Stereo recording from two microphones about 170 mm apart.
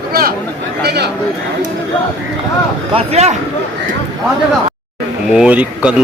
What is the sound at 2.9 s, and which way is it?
Speech, 40° right (ahead or behind).